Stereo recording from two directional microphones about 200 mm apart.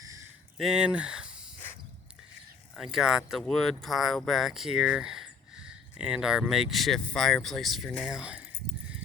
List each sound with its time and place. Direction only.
0.6 s speech: 5° right (ahead or behind)
2.7 s speech: centre (ahead or behind)